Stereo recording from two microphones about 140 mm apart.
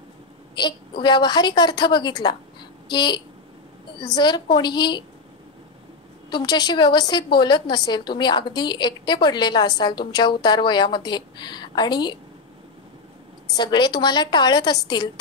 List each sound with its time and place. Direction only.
0.6 s a woman's voice: 35° left (ahead or behind)
6.3 s a woman's voice: 30° left (ahead or behind)
13.5 s a woman's voice: 30° left (ahead or behind)